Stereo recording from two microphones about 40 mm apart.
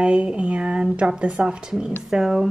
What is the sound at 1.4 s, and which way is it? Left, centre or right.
Speech, centre.